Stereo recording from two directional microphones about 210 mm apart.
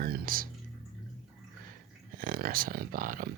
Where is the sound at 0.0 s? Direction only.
45° right (ahead or behind).